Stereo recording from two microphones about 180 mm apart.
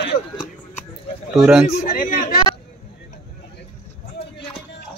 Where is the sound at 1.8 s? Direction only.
50° left (ahead or behind).